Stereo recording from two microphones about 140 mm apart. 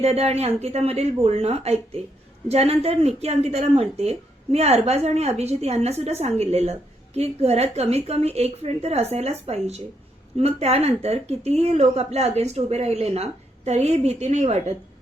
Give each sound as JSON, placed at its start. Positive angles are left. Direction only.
{"t": 0.0, "sound": "a woman's voice", "side_deg": -50}